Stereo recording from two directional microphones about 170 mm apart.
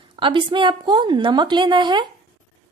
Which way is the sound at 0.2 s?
30° right (ahead or behind).